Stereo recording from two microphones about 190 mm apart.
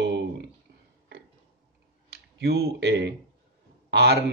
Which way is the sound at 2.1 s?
55° right (ahead or behind).